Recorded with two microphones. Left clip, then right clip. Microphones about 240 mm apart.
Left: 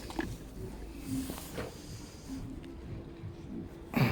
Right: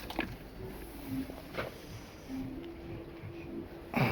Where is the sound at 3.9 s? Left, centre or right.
Centre.